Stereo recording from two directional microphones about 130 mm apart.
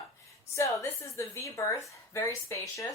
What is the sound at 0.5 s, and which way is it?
A woman's voice, 25° left (ahead or behind).